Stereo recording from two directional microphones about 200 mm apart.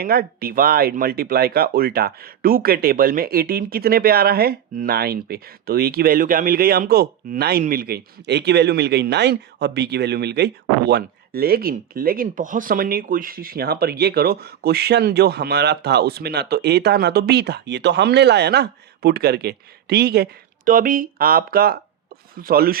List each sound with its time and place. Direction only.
0.0 s speech: 50° right (ahead or behind)
20.7 s speech: 45° right (ahead or behind)